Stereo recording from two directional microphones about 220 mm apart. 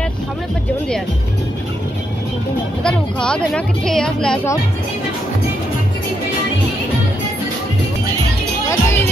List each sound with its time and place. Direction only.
2.8 s a woman's voice: 5° left (ahead or behind)
8.6 s music: 10° left (ahead or behind)